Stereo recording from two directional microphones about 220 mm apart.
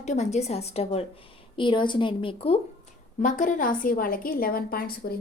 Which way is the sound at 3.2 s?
35° left (ahead or behind).